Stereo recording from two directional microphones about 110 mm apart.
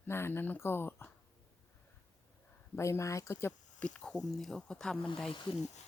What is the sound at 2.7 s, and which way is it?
Speech, 25° left (ahead or behind).